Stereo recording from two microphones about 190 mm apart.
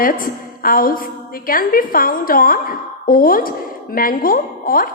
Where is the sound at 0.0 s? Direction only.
50° left (ahead or behind).